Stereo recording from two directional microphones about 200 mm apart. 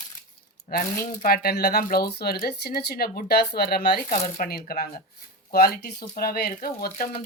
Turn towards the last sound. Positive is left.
turn(degrees=45)  # may be behind; listen again after turning